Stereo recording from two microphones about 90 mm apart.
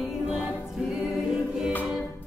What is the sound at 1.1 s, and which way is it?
Choir, 5° right (ahead or behind).